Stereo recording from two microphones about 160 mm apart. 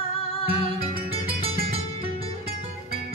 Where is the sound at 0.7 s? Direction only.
35° right (ahead or behind).